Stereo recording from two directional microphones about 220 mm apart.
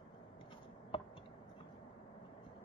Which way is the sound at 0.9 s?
25° left (ahead or behind).